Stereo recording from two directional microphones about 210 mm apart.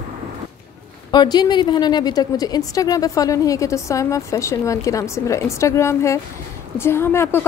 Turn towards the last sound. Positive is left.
turn(degrees=10)  # may be behind; listen again after turning